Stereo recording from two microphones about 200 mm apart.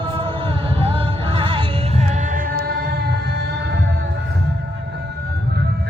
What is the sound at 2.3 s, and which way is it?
Music, 50° right (ahead or behind).